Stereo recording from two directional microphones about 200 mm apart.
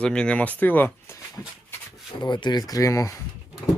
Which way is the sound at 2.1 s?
20° left (ahead or behind).